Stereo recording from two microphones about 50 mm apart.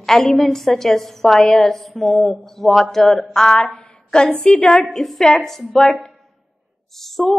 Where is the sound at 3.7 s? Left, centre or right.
Left.